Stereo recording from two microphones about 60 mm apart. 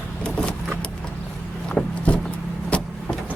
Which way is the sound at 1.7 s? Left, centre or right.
Centre.